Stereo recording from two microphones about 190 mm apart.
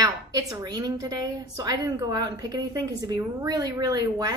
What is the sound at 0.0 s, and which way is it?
A woman's voice, 20° right (ahead or behind).